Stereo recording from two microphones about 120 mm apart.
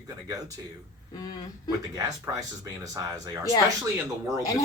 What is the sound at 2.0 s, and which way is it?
Speech, 25° right (ahead or behind).